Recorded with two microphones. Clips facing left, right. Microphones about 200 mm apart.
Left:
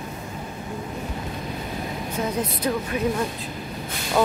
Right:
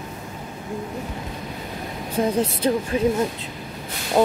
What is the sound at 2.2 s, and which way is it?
Speech, 30° right (ahead or behind).